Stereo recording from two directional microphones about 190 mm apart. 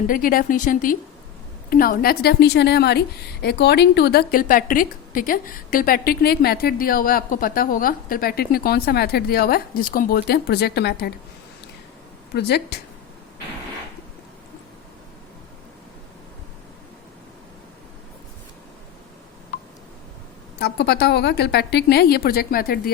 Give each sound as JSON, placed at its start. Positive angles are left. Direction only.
{"t": 0.1, "sound": "a woman's voice", "side_deg": 50}
{"t": 12.3, "sound": "a woman's voice", "side_deg": 55}
{"t": 20.6, "sound": "a woman's voice", "side_deg": 60}